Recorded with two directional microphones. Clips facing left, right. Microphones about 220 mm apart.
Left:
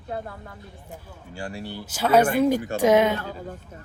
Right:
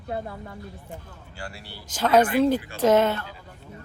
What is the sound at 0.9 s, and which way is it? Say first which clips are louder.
Speech: left 1 dB; 15° left (ahead or behind).